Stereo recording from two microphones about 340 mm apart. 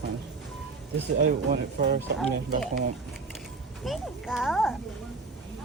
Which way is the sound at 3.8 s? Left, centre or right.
Centre.